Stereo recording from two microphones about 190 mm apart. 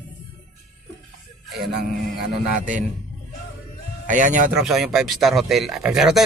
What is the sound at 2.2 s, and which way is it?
Speech, 40° right (ahead or behind).